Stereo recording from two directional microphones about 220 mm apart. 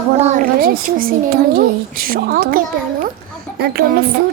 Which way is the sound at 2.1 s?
40° right (ahead or behind).